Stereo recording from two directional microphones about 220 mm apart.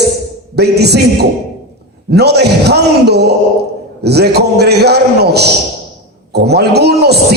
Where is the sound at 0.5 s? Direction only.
50° right (ahead or behind).